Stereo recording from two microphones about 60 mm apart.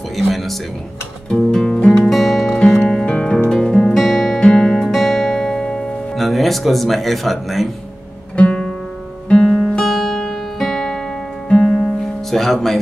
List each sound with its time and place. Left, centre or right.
0.1 s music: centre
1.3 s music: centre
2.0 s music: centre
6.1 s speech: centre
8.4 s music: left; by 12.7 s centre